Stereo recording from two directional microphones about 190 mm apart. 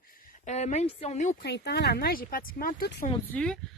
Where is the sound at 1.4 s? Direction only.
60° left (ahead or behind).